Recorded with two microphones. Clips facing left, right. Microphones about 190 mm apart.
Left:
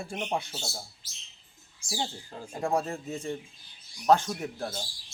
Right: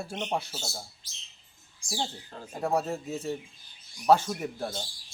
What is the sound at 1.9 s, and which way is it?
Speech, centre (ahead or behind).